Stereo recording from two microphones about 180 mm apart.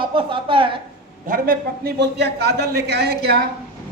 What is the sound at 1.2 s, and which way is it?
A man's voice, 55° right (ahead or behind).